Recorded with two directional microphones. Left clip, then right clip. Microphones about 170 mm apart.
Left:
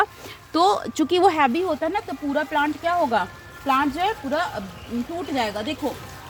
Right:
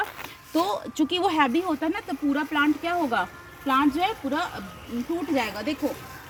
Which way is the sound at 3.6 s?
30° left (ahead or behind).